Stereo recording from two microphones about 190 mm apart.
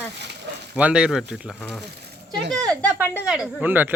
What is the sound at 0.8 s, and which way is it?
Speech, 5° right (ahead or behind).